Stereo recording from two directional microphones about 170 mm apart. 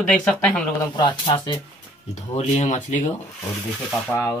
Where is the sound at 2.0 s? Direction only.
40° left (ahead or behind).